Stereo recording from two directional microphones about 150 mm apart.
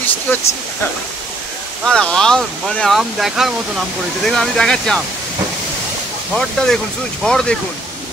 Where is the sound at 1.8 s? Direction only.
5° left (ahead or behind).